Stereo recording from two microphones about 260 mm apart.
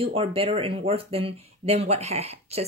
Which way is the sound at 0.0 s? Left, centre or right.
Right.